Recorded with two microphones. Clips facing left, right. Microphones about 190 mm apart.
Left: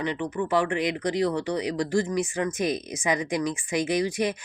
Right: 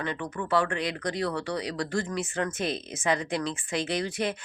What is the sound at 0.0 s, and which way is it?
Speech, 15° left (ahead or behind).